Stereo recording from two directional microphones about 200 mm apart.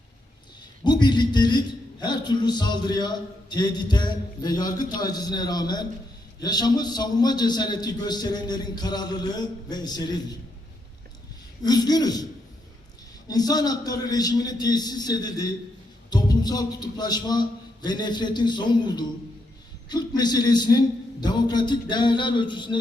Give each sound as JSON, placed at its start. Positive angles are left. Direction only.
{"t": 0.9, "sound": "a sound", "side_deg": 20}
{"t": 3.5, "sound": "a man's voice", "side_deg": 20}
{"t": 11.6, "sound": "a man's voice", "side_deg": 20}
{"t": 13.2, "sound": "a man's voice", "side_deg": 20}